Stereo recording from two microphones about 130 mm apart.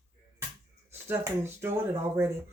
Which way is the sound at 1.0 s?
20° right (ahead or behind).